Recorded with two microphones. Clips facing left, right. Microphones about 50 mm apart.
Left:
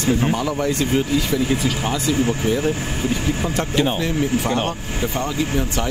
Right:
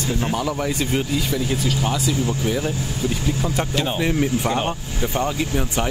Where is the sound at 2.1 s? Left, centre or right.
Left.